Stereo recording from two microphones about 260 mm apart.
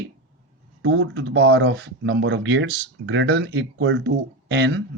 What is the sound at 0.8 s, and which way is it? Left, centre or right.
Speech, right.